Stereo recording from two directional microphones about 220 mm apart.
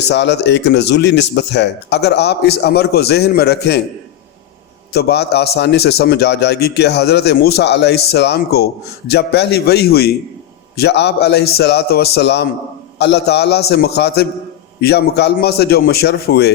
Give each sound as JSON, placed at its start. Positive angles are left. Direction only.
{"t": 0.1, "sound": "speech", "side_deg": 50}
{"t": 4.9, "sound": "speech", "side_deg": 45}